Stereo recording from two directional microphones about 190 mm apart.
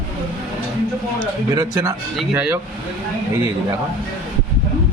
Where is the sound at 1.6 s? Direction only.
20° right (ahead or behind).